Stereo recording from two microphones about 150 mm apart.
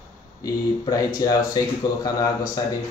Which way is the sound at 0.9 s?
25° left (ahead or behind).